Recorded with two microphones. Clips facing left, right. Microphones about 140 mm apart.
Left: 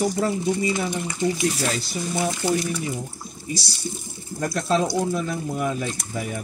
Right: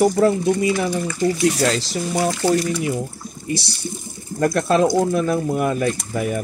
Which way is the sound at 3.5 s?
60° right (ahead or behind).